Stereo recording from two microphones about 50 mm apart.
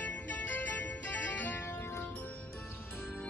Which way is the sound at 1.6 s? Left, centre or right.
Left.